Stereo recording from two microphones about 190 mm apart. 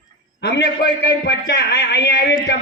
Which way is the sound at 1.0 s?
60° left (ahead or behind).